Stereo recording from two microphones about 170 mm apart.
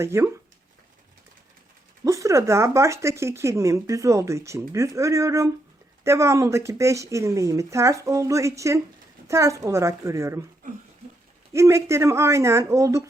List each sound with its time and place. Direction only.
0.0 s speech: 15° right (ahead or behind)
2.0 s speech: 20° right (ahead or behind)
11.5 s speech: 15° right (ahead or behind)